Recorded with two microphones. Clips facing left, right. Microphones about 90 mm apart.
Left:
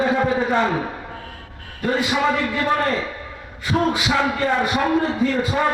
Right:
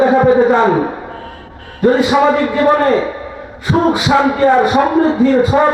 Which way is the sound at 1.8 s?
30° right (ahead or behind).